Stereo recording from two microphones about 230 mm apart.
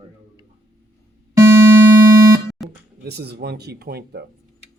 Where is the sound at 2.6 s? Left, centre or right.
Centre.